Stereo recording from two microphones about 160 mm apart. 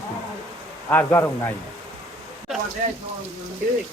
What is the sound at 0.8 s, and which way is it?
Speech, 15° left (ahead or behind).